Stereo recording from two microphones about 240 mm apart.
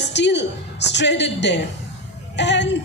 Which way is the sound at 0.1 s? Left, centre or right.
Left.